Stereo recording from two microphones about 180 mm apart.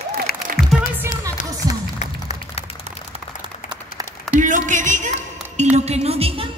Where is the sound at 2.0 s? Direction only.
35° left (ahead or behind).